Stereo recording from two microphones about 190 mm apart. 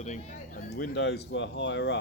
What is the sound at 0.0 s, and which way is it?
Speech, 40° left (ahead or behind).